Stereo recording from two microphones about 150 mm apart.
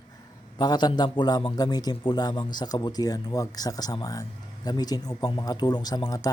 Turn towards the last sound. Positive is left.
turn(degrees=25)  # may be behind; listen again after turning